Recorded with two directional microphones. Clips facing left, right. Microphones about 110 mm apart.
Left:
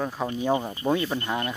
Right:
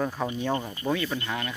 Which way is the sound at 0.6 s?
25° left (ahead or behind).